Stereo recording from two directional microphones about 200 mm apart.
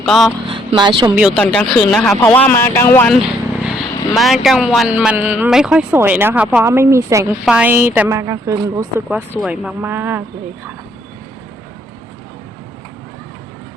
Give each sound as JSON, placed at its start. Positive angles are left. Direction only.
{"t": 0.0, "sound": "speech", "side_deg": 0}
{"t": 0.4, "sound": "speech", "side_deg": -25}
{"t": 1.1, "sound": "speech", "side_deg": -5}
{"t": 3.7, "sound": "speech", "side_deg": 0}